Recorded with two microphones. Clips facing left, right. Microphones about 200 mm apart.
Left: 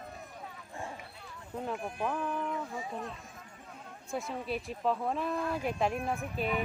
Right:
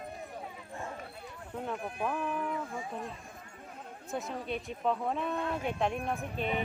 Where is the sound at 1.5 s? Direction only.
5° left (ahead or behind).